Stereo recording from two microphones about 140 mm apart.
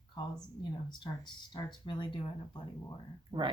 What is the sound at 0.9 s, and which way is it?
Speech, 35° left (ahead or behind).